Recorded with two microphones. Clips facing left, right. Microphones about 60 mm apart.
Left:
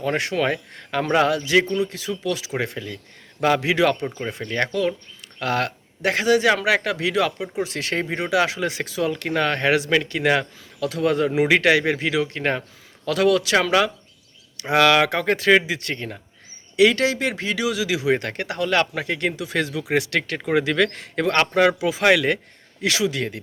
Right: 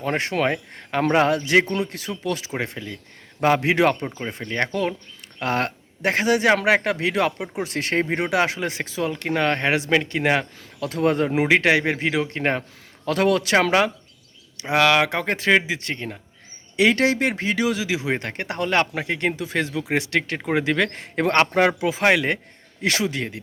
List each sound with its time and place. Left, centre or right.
0.2 s speech: right
1.7 s speech: right
2.2 s speech: right
2.5 s speech: right
3.4 s speech: right
4.4 s speech: right
8.1 s speech: right
8.4 s speech: right
14.8 s speech: centre
15.1 s speech: right
16.7 s speech: right
22.8 s speech: right